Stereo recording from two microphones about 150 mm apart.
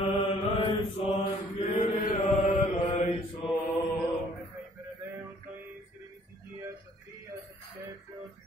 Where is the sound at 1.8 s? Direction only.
55° left (ahead or behind).